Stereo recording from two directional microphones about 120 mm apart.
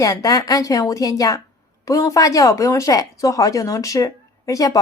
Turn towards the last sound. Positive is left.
turn(degrees=30)  # may be behind; listen again after turning